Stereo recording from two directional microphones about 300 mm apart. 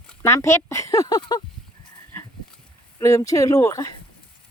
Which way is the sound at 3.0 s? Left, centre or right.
Centre.